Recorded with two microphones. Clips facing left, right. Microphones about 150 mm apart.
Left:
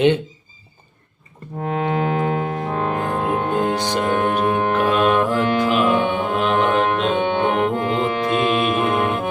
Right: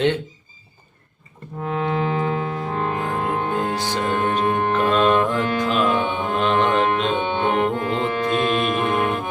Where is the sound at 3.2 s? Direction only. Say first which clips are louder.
Left 4 dB; 20° left (ahead or behind); by 9.2 s centre (ahead or behind).